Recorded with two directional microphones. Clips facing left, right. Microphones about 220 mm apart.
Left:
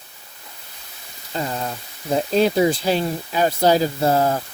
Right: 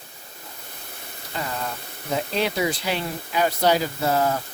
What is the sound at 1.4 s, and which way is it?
Speech, 30° left (ahead or behind).